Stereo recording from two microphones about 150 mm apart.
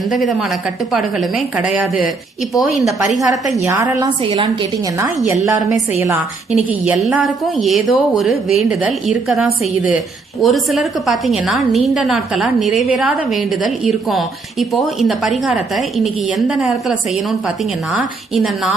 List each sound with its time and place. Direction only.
0.2 s a woman's voice: centre (ahead or behind)
3.7 s a woman's voice: 20° right (ahead or behind)
4.2 s a woman's voice: 35° right (ahead or behind)
4.9 s a woman's voice: 20° right (ahead or behind)
6.5 s a woman's voice: 5° right (ahead or behind)